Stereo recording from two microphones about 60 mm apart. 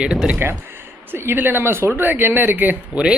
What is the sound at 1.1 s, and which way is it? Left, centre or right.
Speech, right.